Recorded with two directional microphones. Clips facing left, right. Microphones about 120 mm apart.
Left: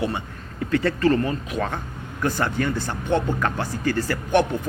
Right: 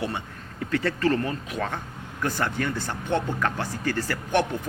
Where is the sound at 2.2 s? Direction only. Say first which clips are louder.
Left 3 dB; 25° left (ahead or behind).